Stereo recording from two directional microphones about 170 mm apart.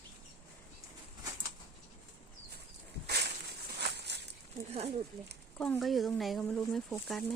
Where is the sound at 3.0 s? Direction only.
75° right (ahead or behind).